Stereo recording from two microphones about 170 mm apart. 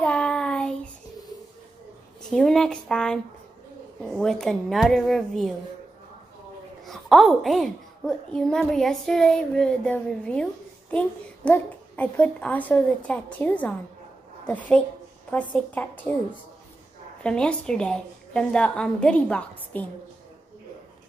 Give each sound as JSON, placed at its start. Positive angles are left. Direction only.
{"t": 0.0, "sound": "child singing", "side_deg": 5}
{"t": 2.3, "sound": "a woman's voice", "side_deg": 0}
{"t": 6.8, "sound": "a child's voice", "side_deg": 0}
{"t": 17.2, "sound": "a woman's voice", "side_deg": 5}